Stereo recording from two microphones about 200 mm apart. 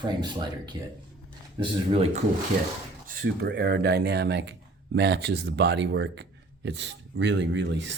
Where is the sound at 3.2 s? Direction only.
55° right (ahead or behind).